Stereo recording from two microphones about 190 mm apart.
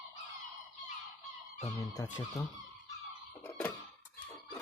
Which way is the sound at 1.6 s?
20° left (ahead or behind).